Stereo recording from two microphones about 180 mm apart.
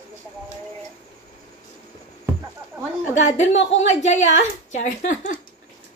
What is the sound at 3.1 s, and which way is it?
A woman's voice, 40° left (ahead or behind).